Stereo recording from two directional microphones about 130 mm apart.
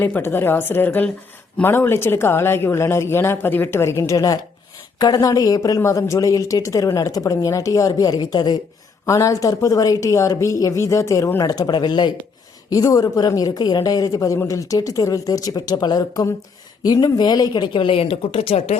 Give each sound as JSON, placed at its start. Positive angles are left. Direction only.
{"t": 0.0, "sound": "a woman's voice", "side_deg": 15}